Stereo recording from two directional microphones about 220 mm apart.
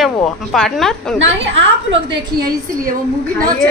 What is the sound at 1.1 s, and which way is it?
A woman's voice, 55° right (ahead or behind).